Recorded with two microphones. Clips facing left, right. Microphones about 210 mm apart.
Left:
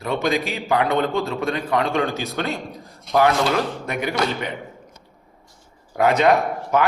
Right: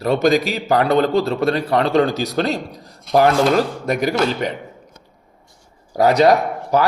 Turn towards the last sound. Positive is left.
turn(degrees=-35)  # may be behind; listen again after turning